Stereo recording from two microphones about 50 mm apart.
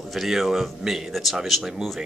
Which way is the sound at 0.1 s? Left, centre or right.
Centre.